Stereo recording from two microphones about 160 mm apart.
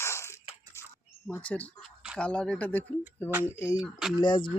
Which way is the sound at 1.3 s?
10° left (ahead or behind).